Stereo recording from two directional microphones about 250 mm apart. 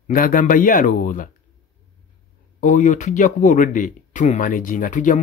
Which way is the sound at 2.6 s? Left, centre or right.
Left.